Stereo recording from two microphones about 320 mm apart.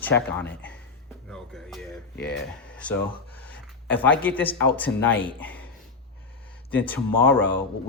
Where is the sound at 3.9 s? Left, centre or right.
Centre.